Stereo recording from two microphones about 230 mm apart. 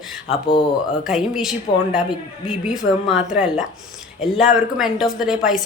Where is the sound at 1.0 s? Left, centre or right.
Centre.